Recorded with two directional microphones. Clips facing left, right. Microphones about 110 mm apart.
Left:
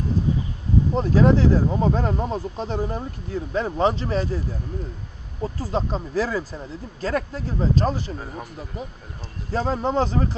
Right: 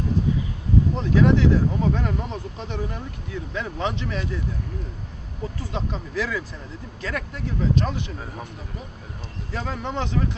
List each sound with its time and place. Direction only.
0.9 s speech: 35° left (ahead or behind)
9.5 s speech: 35° left (ahead or behind)